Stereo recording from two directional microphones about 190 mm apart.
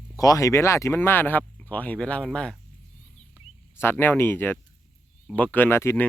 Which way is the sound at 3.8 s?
10° left (ahead or behind).